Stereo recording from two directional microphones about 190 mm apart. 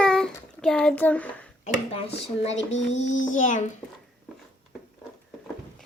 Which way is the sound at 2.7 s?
40° left (ahead or behind).